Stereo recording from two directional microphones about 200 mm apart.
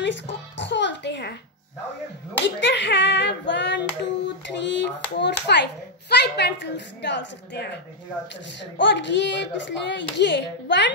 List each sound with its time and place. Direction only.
0.0 s music: 60° left (ahead or behind)
2.4 s a child's voice: 60° left (ahead or behind)